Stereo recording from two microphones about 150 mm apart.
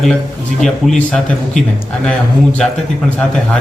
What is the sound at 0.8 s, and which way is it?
Speech, centre (ahead or behind).